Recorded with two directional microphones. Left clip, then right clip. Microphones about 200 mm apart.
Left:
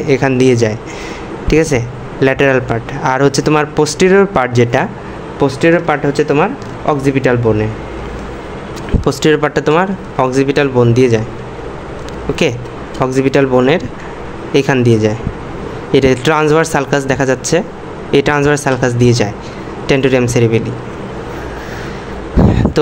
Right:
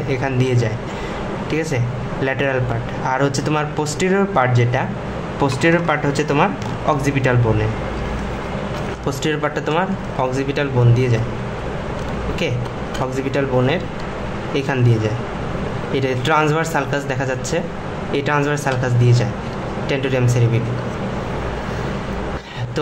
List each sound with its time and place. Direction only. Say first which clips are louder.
0.1 s speech: left 10 dB; 35° left (ahead or behind)
9.0 s speech: left 10 dB; 35° left (ahead or behind)
13.0 s speech: left 10 dB; 35° left (ahead or behind)